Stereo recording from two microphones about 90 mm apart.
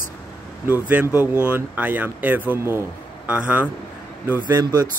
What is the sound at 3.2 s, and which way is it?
Speech, 15° right (ahead or behind).